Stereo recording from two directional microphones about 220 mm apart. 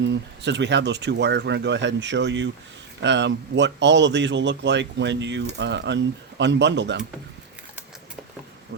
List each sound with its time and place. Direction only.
0.0 s speech: 55° right (ahead or behind)